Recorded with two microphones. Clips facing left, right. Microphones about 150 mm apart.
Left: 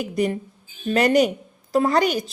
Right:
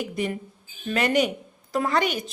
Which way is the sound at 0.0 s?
40° left (ahead or behind).